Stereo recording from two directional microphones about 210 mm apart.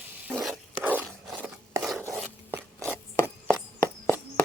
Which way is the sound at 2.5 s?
10° right (ahead or behind).